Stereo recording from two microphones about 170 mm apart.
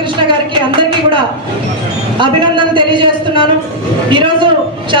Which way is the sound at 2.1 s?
30° right (ahead or behind).